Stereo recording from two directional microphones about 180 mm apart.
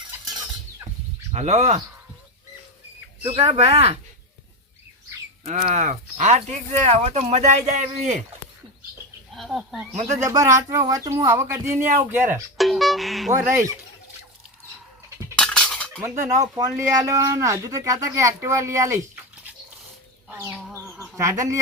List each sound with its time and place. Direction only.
1.3 s speech: 40° right (ahead or behind)
3.2 s speech: 30° right (ahead or behind)
5.7 s speech: 40° right (ahead or behind)
9.3 s speech: centre (ahead or behind)
9.9 s speech: 40° right (ahead or behind)
10.2 s speech: 15° right (ahead or behind)
12.5 s music: centre (ahead or behind)
15.4 s music: 5° left (ahead or behind)
16.2 s speech: 15° right (ahead or behind)
20.2 s chicken: 10° right (ahead or behind)
21.2 s speech: 15° right (ahead or behind)